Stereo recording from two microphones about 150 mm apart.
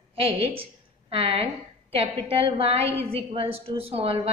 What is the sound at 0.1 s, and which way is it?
A woman's voice, 40° right (ahead or behind).